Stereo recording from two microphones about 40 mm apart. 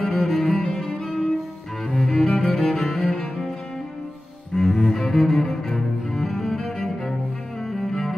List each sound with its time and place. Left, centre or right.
0.0 s cello: centre
1.9 s cello: centre
4.6 s cello: centre